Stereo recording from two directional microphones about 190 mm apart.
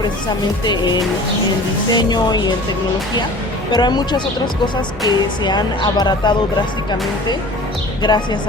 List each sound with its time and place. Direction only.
0.6 s speech: 20° left (ahead or behind)
1.9 s speech: 20° left (ahead or behind)
3.7 s speech: 20° left (ahead or behind)
8.0 s speech: 20° left (ahead or behind)